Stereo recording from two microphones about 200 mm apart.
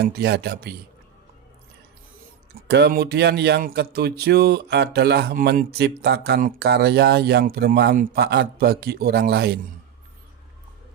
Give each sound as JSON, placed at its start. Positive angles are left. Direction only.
{"t": 0.0, "sound": "speech", "side_deg": -55}
{"t": 2.6, "sound": "speech", "side_deg": -55}